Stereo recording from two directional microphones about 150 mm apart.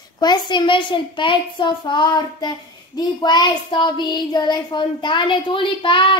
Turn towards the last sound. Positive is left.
turn(degrees=35)  # may be behind; listen again after turning